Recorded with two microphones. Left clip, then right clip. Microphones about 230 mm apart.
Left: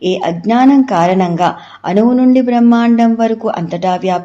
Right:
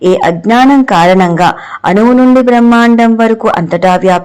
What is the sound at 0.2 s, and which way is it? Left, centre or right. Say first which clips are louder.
A man's voice: right 5 dB; right.